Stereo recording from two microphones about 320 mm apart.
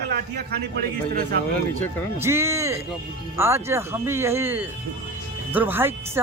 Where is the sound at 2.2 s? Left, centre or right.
Centre.